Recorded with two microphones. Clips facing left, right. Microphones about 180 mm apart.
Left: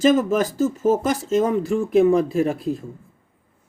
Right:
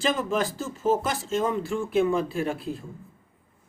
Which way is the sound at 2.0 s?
40° left (ahead or behind).